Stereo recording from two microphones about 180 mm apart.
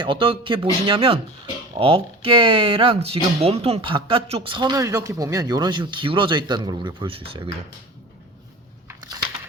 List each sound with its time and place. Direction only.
0.0 s speech: 30° right (ahead or behind)